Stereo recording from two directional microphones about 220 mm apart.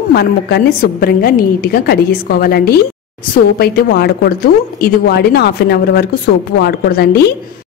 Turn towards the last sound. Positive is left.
turn(degrees=45)  # may be behind; listen again after turning